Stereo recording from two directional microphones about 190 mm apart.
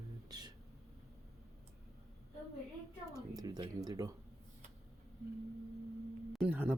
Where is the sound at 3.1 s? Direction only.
20° right (ahead or behind).